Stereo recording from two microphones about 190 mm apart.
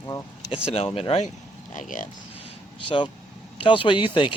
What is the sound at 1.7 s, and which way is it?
Speech, 45° left (ahead or behind).